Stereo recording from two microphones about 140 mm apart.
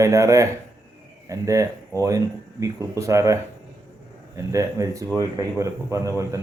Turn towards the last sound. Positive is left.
turn(degrees=-20)  # may be behind; listen again after turning